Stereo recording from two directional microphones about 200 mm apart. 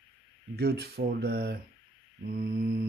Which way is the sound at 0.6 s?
50° right (ahead or behind).